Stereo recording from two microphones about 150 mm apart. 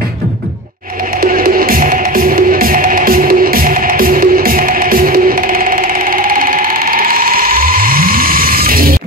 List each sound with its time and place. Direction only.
1.2 s music: 70° right (ahead or behind)